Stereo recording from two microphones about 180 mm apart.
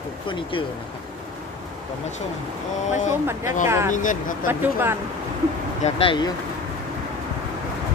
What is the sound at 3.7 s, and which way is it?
Speech, 15° right (ahead or behind).